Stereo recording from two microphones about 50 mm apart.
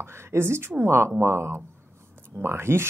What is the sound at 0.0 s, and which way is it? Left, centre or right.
Speech, right.